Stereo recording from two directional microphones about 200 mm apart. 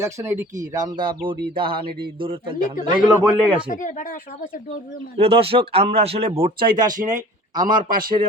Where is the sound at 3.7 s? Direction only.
40° left (ahead or behind).